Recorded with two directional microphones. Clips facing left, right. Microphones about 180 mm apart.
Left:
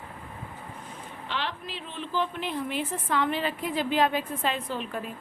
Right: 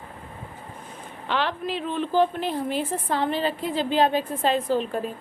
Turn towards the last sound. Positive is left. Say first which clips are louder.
# right 8 dB
turn(degrees=-35)  # may be behind; listen again after turning